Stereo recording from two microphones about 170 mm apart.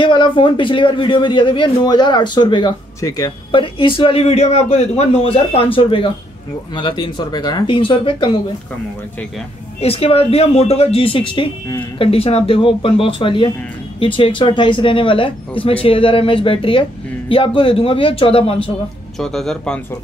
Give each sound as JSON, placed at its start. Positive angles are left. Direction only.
{"t": 0.0, "sound": "a man's voice", "side_deg": 30}
{"t": 9.8, "sound": "speech", "side_deg": 35}
{"t": 19.1, "sound": "speech", "side_deg": 5}